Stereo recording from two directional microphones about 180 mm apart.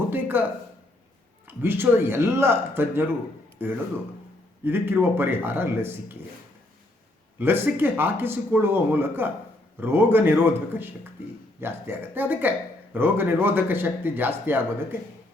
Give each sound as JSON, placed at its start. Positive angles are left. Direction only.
{"t": 0.1, "sound": "a sound", "side_deg": -10}
{"t": 1.5, "sound": "speech", "side_deg": -10}
{"t": 7.3, "sound": "speech", "side_deg": -10}